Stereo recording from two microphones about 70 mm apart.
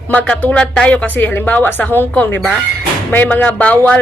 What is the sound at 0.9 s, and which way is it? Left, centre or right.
A woman's voice, left.